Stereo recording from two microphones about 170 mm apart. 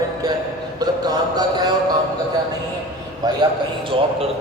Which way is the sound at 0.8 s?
25° right (ahead or behind).